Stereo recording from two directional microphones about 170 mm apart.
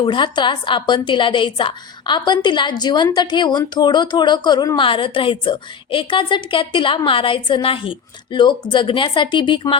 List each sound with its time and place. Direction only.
0.0 s a woman's voice: 25° left (ahead or behind)